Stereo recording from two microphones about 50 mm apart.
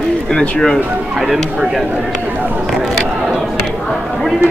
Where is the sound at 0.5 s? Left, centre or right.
Centre.